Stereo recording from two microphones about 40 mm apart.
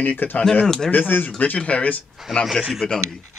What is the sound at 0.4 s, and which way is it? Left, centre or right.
Speech, left.